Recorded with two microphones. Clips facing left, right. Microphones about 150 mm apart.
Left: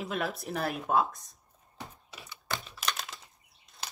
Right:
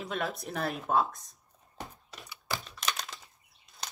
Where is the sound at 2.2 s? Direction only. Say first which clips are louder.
Even; centre (ahead or behind).